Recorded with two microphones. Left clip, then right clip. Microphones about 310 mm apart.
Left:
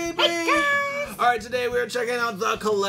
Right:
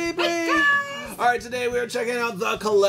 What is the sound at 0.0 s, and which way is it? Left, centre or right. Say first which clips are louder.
Music: left 1 dB; right.